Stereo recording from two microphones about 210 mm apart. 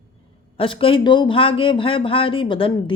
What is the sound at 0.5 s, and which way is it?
Speech, 25° left (ahead or behind).